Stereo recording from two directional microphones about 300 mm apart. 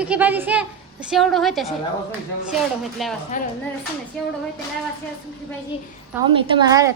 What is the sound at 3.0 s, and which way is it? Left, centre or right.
Speech, centre.